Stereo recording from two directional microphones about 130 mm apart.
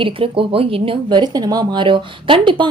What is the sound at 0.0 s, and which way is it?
Speech, 45° right (ahead or behind).